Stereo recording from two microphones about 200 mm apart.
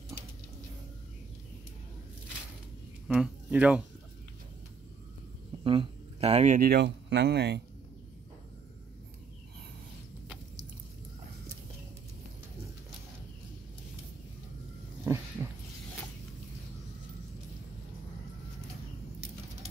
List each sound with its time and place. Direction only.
3.1 s speech: 5° right (ahead or behind)
5.6 s speech: 25° right (ahead or behind); by 7.6 s 55° right (ahead or behind)
15.1 s a sound: 15° right (ahead or behind)